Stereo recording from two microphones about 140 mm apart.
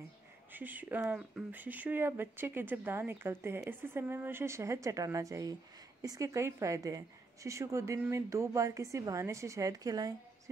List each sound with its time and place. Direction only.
0.5 s speech: 10° right (ahead or behind)